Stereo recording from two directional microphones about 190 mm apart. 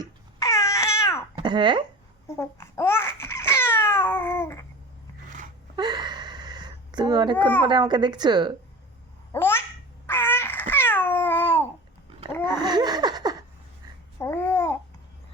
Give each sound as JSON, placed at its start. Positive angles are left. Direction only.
{"t": 0.3, "sound": "cat", "side_deg": 15}
{"t": 1.4, "sound": "speech", "side_deg": -25}
{"t": 2.2, "sound": "babbling", "side_deg": 15}
{"t": 5.7, "sound": "a sound", "side_deg": -20}
{"t": 7.6, "sound": "speech", "side_deg": -25}
{"t": 9.3, "sound": "babbling", "side_deg": 10}
{"t": 12.5, "sound": "a sound", "side_deg": -20}
{"t": 14.2, "sound": "babbling", "side_deg": 15}